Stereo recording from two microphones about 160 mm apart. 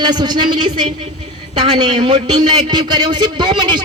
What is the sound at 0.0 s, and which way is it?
A man's voice, 25° right (ahead or behind).